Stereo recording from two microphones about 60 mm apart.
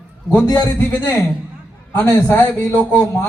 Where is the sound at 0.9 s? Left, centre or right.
Left.